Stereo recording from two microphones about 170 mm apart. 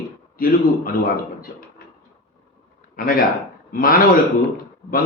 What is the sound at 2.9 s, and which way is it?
A man's voice, 60° left (ahead or behind).